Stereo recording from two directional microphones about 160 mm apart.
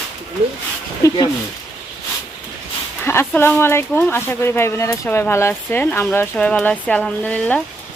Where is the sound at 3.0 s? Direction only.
15° left (ahead or behind).